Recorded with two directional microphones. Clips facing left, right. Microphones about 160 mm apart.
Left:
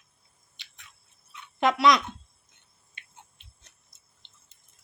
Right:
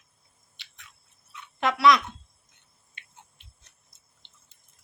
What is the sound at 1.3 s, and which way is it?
Toothbrush, 20° left (ahead or behind).